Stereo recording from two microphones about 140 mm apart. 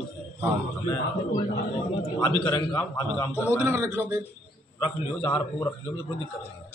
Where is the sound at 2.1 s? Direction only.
25° left (ahead or behind).